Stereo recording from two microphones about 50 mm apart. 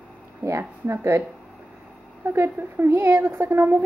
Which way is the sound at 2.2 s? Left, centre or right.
Right.